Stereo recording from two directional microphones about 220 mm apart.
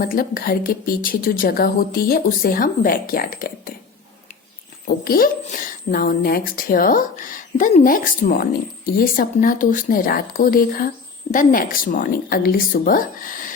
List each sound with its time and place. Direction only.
0.0 s speech: 40° left (ahead or behind)
5.0 s speech: 40° left (ahead or behind)